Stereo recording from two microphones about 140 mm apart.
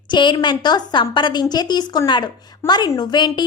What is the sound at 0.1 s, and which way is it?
A woman's voice, 35° left (ahead or behind).